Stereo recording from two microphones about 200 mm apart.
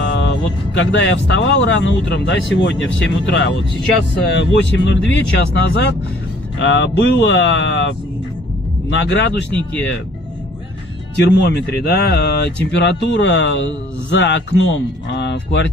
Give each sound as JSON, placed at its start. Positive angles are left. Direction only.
{"t": 0.0, "sound": "speech", "side_deg": 60}
{"t": 6.6, "sound": "speech", "side_deg": 60}
{"t": 8.9, "sound": "speech", "side_deg": 60}
{"t": 11.1, "sound": "speech", "side_deg": 55}